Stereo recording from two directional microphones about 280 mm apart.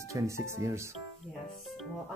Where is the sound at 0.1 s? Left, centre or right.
Centre.